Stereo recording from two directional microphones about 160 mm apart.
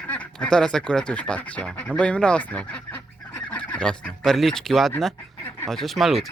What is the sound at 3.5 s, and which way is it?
Fowl, 5° left (ahead or behind).